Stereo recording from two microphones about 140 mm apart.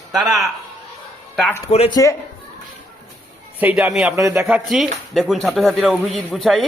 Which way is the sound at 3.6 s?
10° right (ahead or behind).